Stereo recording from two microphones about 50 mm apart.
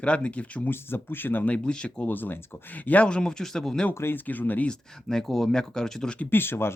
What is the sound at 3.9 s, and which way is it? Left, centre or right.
Speech, left.